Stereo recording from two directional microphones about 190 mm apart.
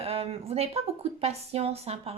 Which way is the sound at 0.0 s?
30° right (ahead or behind).